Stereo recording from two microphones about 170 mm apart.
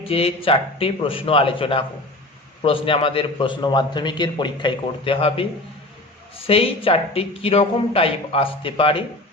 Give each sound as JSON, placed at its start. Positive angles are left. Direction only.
{"t": 0.0, "sound": "a man's voice", "side_deg": 35}